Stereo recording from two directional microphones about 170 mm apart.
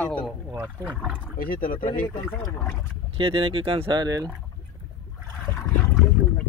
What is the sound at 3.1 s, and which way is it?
Speech, 30° right (ahead or behind).